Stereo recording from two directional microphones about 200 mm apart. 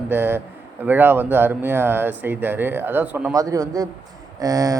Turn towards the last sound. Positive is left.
turn(degrees=-15)  # may be behind; listen again after turning